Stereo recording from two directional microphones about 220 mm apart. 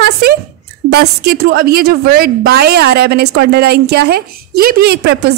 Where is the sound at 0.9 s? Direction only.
45° right (ahead or behind).